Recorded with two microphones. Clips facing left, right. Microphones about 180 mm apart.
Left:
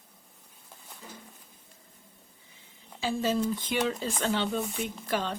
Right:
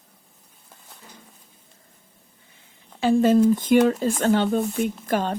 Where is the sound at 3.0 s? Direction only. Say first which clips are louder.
Right 11 dB; 55° right (ahead or behind).